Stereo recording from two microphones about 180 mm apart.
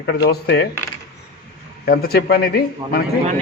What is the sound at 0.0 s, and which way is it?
Coin, 65° left (ahead or behind).